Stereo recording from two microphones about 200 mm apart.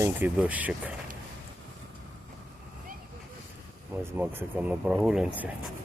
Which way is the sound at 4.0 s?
10° right (ahead or behind).